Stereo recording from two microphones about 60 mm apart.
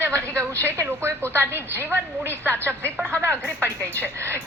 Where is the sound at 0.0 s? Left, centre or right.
Right.